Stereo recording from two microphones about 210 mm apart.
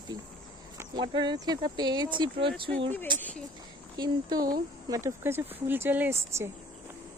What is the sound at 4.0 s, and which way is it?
Speech, 20° right (ahead or behind).